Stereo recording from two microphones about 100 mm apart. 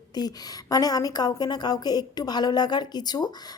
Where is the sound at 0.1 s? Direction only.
40° left (ahead or behind).